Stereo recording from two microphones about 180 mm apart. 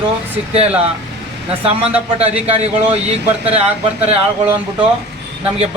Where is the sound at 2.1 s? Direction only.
35° right (ahead or behind).